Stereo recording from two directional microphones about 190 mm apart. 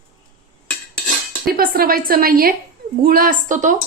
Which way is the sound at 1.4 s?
50° right (ahead or behind).